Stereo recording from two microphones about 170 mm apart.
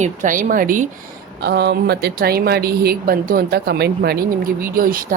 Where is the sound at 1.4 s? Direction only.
70° right (ahead or behind).